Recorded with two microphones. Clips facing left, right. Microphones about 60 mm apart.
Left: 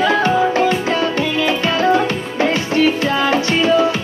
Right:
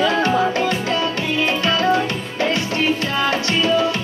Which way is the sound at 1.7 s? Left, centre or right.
Left.